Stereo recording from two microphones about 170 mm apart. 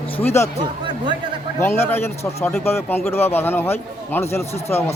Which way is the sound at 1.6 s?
15° left (ahead or behind).